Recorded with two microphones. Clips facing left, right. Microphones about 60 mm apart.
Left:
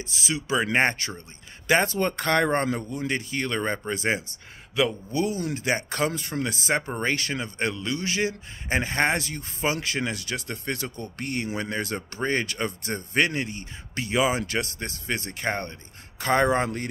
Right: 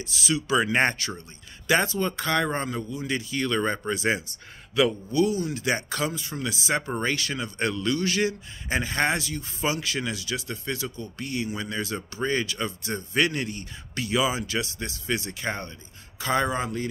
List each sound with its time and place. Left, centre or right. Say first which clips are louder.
0.0 s speech: right 2 dB; left
1.9 s a man's voice: left 2 dB; left